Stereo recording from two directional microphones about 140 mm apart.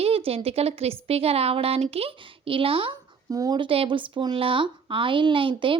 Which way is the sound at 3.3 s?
25° right (ahead or behind).